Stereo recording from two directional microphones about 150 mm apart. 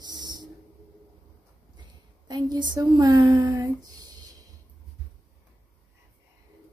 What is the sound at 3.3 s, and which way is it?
Humming, 25° right (ahead or behind).